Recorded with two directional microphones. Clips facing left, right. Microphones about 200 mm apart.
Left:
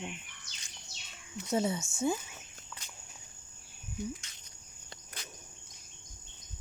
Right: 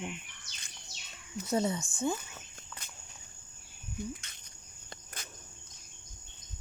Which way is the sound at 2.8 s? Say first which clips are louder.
Even; 55° right (ahead or behind).